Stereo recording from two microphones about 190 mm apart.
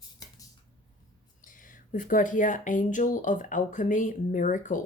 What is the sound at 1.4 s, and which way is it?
Speech, 45° left (ahead or behind).